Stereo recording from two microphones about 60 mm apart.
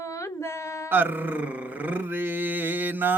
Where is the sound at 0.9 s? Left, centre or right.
Right.